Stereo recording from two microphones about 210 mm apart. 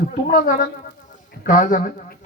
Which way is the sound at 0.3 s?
40° left (ahead or behind).